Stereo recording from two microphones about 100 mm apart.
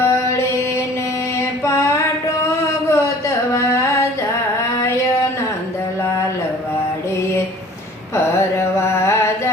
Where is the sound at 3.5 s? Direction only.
30° left (ahead or behind).